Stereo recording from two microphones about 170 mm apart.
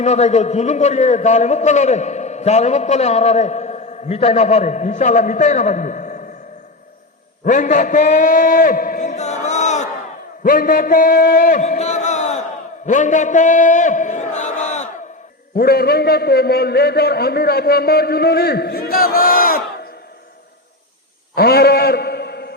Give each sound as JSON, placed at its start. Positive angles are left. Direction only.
{"t": 0.0, "sound": "a man's voice", "side_deg": 40}
{"t": 7.4, "sound": "a man's voice", "side_deg": 50}
{"t": 10.4, "sound": "a man's voice", "side_deg": 55}
{"t": 15.5, "sound": "a man's voice", "side_deg": 65}
{"t": 21.3, "sound": "a sound", "side_deg": 65}